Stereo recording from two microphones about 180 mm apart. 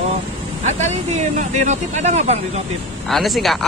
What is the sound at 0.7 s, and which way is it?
Speech, 40° right (ahead or behind).